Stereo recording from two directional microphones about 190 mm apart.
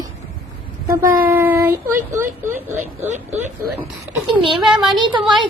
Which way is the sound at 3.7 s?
10° right (ahead or behind).